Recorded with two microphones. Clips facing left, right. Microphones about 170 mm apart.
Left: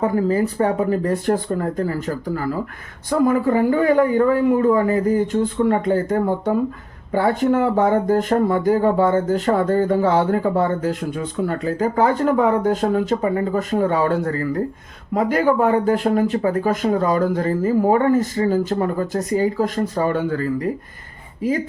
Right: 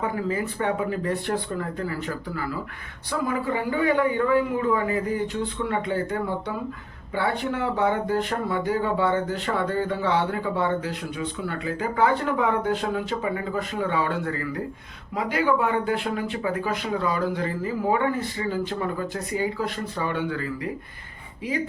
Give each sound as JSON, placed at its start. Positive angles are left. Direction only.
{"t": 0.0, "sound": "speech", "side_deg": 40}